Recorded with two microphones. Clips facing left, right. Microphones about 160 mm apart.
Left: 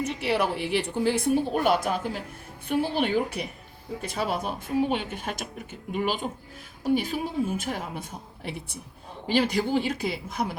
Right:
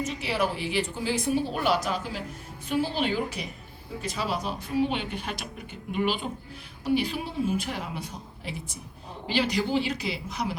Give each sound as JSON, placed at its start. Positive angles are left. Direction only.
{"t": 0.0, "sound": "a woman's voice", "side_deg": 60}